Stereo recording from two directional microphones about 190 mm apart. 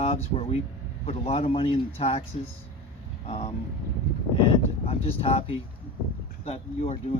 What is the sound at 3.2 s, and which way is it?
Speech, 30° left (ahead or behind).